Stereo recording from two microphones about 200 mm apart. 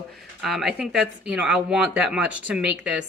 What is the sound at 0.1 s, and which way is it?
A woman's voice, centre (ahead or behind).